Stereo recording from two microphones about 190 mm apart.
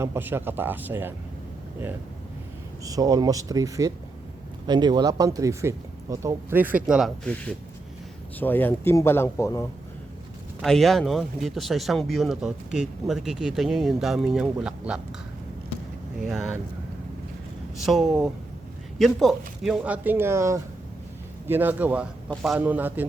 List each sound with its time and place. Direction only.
0.0 s speech: 10° right (ahead or behind)
2.8 s speech: 20° right (ahead or behind); by 9.6 s 15° left (ahead or behind)
10.6 s speech: centre (ahead or behind)
16.1 s speech: 5° right (ahead or behind)
17.8 s speech: centre (ahead or behind)